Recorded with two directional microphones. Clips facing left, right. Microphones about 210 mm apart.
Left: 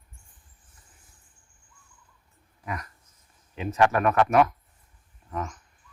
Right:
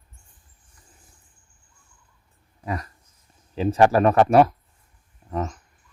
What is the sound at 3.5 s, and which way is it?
Speech, 35° right (ahead or behind).